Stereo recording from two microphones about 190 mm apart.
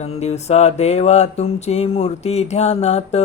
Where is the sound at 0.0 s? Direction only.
35° left (ahead or behind).